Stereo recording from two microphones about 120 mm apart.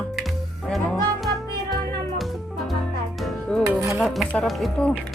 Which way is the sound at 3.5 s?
5° left (ahead or behind).